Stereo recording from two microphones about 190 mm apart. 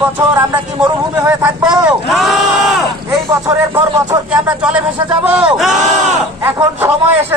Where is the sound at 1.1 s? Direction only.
10° right (ahead or behind).